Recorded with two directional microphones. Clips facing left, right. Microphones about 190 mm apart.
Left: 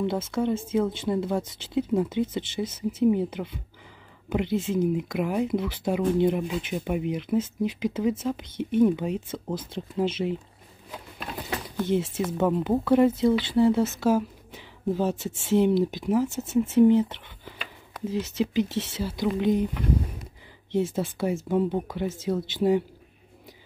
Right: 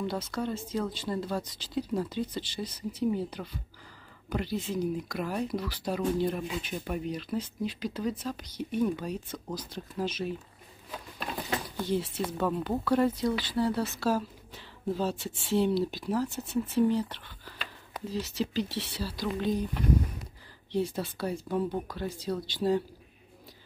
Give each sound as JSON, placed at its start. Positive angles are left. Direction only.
{"t": 0.0, "sound": "speech", "side_deg": 25}
{"t": 11.8, "sound": "speech", "side_deg": 20}
{"t": 20.7, "sound": "speech", "side_deg": 20}